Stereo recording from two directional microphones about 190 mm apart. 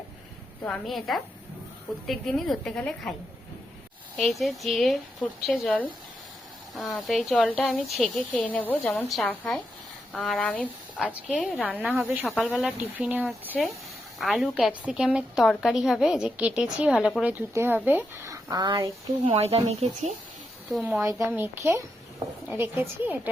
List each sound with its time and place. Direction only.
0.6 s speech: 5° left (ahead or behind)
4.2 s speech: centre (ahead or behind)
11.8 s speech: 10° right (ahead or behind)
12.3 s speech: 10° left (ahead or behind)
12.5 s speech: 5° right (ahead or behind); by 18.9 s 20° right (ahead or behind)
19.2 s speech: 35° right (ahead or behind)
20.7 s speech: centre (ahead or behind)
21.2 s speech: 10° right (ahead or behind)